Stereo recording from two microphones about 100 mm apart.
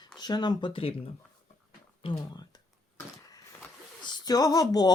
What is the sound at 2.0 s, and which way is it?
Speech, 60° left (ahead or behind).